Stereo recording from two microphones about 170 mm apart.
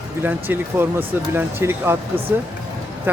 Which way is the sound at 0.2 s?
10° right (ahead or behind).